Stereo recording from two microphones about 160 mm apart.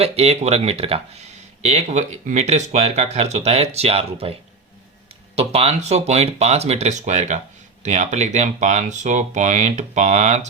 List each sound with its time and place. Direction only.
0.0 s speech: 40° right (ahead or behind)